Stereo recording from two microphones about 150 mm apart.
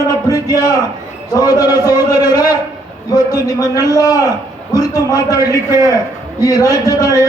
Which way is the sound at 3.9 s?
25° left (ahead or behind).